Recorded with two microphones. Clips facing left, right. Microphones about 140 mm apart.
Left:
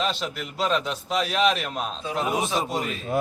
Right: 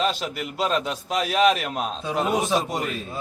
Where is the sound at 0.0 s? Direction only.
5° right (ahead or behind).